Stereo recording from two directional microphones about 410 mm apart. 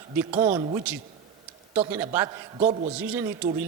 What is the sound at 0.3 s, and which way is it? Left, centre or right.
A man's voice, centre.